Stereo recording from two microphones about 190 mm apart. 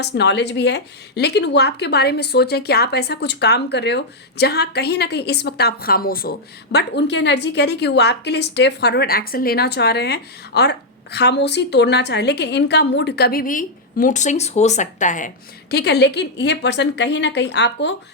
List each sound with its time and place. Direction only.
0.0 s a woman's voice: 65° left (ahead or behind); by 15.3 s 40° left (ahead or behind)
15.7 s a woman's voice: 60° left (ahead or behind)